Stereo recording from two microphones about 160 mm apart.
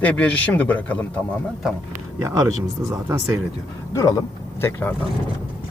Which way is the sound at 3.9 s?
20° left (ahead or behind).